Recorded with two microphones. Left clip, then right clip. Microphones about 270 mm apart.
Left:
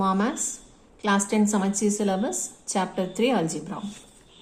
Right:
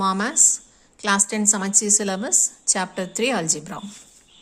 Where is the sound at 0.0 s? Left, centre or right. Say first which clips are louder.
Right 5 dB; right.